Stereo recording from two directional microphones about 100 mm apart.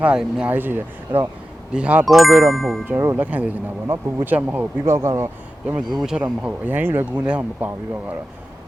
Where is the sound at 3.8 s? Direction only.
30° right (ahead or behind).